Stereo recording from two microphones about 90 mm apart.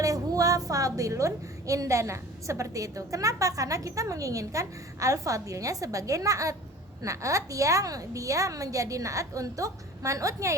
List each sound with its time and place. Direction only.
0.0 s a woman's voice: 40° right (ahead or behind)